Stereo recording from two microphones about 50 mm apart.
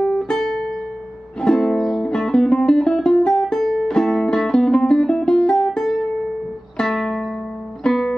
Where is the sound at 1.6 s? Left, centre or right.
Centre.